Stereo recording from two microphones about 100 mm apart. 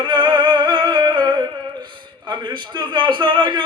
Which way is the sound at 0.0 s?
50° right (ahead or behind).